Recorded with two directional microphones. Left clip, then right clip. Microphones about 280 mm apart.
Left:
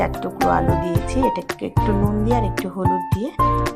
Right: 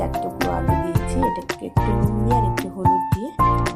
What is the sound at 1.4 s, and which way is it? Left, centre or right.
Speech, centre.